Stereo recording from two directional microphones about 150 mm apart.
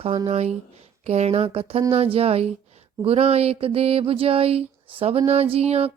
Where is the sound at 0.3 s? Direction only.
45° right (ahead or behind).